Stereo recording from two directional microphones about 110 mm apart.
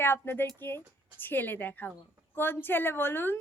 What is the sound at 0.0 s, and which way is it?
A woman's voice, 20° left (ahead or behind).